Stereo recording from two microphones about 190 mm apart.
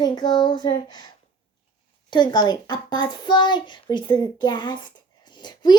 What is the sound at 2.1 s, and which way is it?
A child's voice, 25° left (ahead or behind).